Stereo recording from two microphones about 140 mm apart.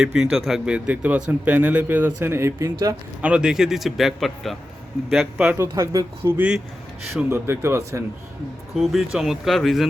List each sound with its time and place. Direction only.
0.0 s speech: 5° right (ahead or behind); by 2.7 s 20° right (ahead or behind)
3.2 s a man's voice: 10° right (ahead or behind)
5.5 s speech: 20° right (ahead or behind)
6.3 s speech: 10° right (ahead or behind)
8.7 s a man's voice: centre (ahead or behind)